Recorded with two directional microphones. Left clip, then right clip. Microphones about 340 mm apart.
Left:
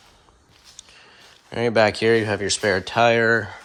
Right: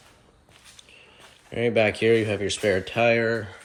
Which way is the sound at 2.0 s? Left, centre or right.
Left.